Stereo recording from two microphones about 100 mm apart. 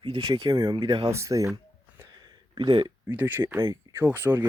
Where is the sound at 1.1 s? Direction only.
30° right (ahead or behind).